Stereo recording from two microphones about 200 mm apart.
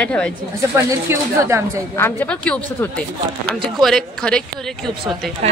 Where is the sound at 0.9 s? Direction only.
15° right (ahead or behind).